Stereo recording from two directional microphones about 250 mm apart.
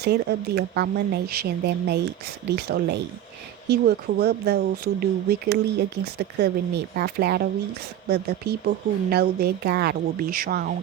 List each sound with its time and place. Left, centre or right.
0.0 s speech: right